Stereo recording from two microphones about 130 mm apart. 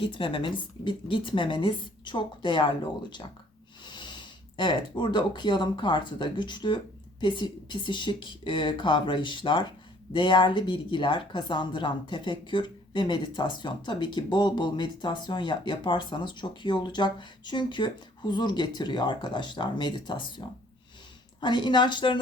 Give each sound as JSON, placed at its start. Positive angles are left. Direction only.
{"t": 0.0, "sound": "speech", "side_deg": 40}